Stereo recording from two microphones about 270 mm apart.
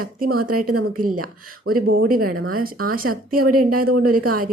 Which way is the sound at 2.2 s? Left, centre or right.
Right.